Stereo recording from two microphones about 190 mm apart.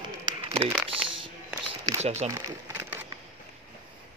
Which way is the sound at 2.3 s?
10° right (ahead or behind).